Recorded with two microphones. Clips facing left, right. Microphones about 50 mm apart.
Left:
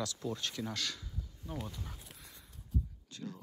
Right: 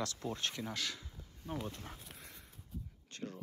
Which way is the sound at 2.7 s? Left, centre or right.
Centre.